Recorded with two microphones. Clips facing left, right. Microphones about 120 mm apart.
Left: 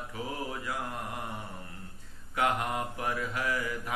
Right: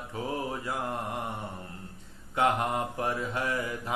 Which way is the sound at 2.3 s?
30° right (ahead or behind).